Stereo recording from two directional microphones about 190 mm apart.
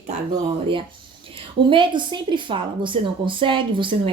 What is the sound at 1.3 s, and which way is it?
A woman's voice, 25° right (ahead or behind).